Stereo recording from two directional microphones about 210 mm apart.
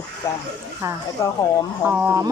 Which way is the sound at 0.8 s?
10° right (ahead or behind).